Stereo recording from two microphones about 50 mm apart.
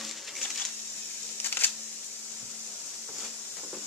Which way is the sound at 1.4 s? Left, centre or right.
Left.